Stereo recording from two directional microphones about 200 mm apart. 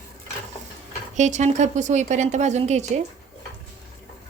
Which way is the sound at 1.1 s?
35° right (ahead or behind).